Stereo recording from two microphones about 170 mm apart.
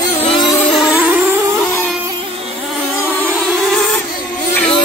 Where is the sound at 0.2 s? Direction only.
35° left (ahead or behind).